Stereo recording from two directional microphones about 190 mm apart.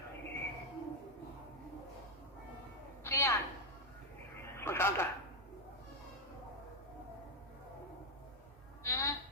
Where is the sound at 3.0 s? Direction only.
15° left (ahead or behind).